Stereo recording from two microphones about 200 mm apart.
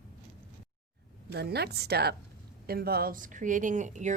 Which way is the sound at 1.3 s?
55° right (ahead or behind).